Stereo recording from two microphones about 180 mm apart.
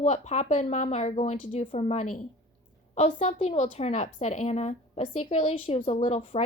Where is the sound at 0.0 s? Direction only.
40° left (ahead or behind).